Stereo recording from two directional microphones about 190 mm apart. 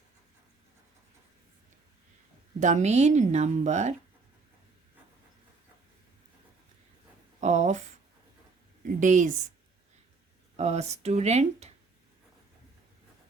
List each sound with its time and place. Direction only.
2.6 s speech: 40° right (ahead or behind)
7.4 s a sound: 40° right (ahead or behind)
9.0 s speech: 40° right (ahead or behind)
10.6 s speech: 35° right (ahead or behind)